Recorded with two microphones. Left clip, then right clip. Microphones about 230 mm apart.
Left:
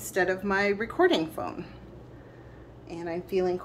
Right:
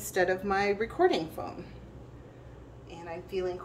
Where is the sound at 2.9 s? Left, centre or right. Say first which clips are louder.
Left 6 dB; left.